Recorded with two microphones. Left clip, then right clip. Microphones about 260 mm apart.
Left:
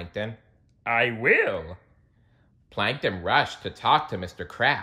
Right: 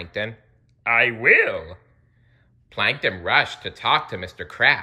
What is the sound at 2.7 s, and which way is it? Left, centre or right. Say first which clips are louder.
Speech: right 4 dB; centre.